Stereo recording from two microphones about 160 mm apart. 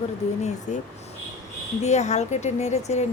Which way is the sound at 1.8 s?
45° left (ahead or behind).